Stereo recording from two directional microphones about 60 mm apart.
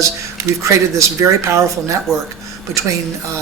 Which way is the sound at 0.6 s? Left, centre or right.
Right.